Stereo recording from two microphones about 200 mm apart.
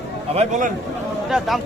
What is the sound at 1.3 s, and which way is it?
Speech, centre (ahead or behind).